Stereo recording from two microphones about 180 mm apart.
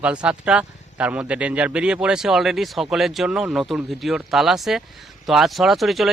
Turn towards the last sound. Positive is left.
turn(degrees=0)  # may be behind; listen again after turning